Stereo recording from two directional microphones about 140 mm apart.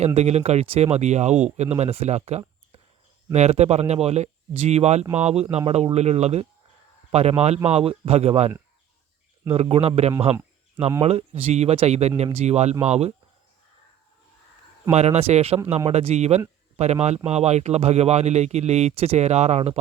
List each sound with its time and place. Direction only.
0.0 s speech: 50° right (ahead or behind)
14.9 s speech: 50° right (ahead or behind)